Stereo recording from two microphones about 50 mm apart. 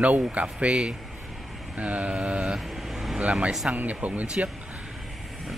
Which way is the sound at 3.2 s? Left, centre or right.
Right.